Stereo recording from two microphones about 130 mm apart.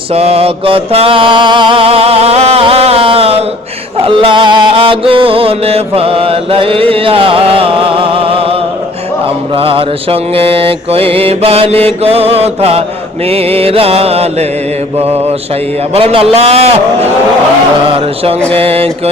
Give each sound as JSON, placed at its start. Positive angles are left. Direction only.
{"t": 0.1, "sound": "mantra", "side_deg": -50}
{"t": 4.0, "sound": "music", "side_deg": -40}
{"t": 9.6, "sound": "mantra", "side_deg": -45}
{"t": 16.0, "sound": "mantra", "side_deg": -50}